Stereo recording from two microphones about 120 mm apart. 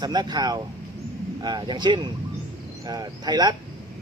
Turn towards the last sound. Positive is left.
turn(degrees=-35)  # may be behind; listen again after turning